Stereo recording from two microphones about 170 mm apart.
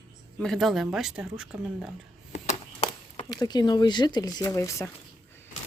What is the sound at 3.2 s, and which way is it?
Speech, 25° left (ahead or behind).